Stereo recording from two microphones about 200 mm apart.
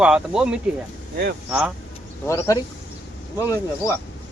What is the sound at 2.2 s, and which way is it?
A man's voice, 15° left (ahead or behind).